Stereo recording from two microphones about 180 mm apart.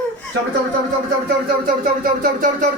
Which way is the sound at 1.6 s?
50° right (ahead or behind).